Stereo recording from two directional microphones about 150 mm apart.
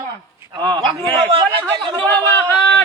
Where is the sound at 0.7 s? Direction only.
30° right (ahead or behind).